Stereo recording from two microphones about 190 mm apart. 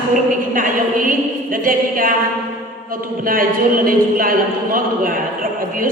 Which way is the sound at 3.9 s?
50° right (ahead or behind).